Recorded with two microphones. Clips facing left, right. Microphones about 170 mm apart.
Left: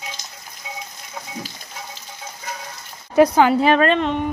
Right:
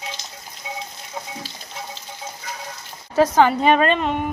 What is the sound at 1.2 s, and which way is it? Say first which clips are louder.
Frying: right 2 dB; 25° right (ahead or behind).